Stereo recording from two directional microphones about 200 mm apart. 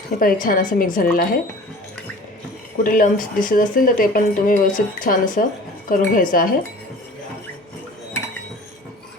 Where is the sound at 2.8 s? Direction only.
45° left (ahead or behind).